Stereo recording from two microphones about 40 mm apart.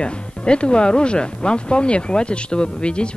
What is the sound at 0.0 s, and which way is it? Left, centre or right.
Speech, left.